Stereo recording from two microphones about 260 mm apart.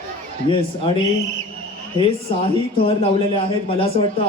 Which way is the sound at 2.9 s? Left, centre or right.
Left.